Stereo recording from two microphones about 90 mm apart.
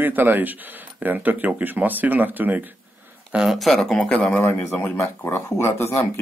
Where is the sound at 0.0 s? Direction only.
20° right (ahead or behind).